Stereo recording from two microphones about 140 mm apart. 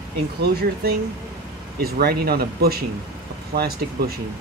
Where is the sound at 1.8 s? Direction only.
90° right.